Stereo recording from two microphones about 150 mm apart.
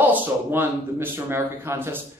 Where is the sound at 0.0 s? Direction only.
10° right (ahead or behind).